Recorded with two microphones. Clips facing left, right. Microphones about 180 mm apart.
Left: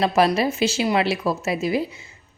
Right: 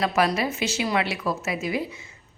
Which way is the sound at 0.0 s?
30° left (ahead or behind).